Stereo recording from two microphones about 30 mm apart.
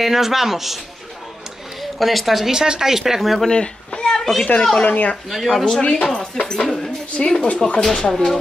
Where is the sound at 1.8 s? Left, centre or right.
Centre.